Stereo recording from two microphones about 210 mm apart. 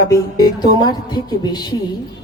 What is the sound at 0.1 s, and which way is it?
A woman's voice, 20° left (ahead or behind).